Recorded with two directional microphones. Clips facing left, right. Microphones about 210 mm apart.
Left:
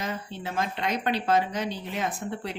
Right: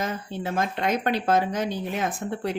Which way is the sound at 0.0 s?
45° right (ahead or behind).